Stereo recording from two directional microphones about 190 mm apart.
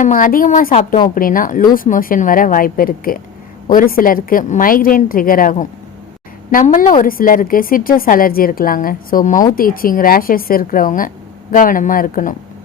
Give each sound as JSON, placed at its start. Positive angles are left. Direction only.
{"t": 0.0, "sound": "a woman's voice", "side_deg": 45}